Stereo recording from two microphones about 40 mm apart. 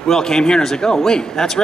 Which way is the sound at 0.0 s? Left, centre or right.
Centre.